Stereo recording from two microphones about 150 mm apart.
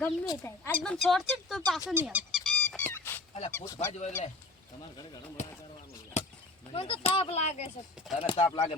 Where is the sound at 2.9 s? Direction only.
15° left (ahead or behind).